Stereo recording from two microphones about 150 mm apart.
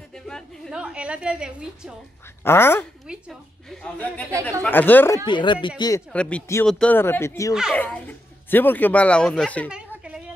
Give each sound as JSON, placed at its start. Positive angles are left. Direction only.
{"t": 0.3, "sound": "a woman's voice", "side_deg": -5}
{"t": 2.4, "sound": "speech", "side_deg": 15}
{"t": 3.1, "sound": "a woman's voice", "side_deg": 0}
{"t": 5.2, "sound": "speech", "side_deg": 30}
{"t": 6.1, "sound": "speech", "side_deg": 5}
{"t": 9.7, "sound": "a sound", "side_deg": -5}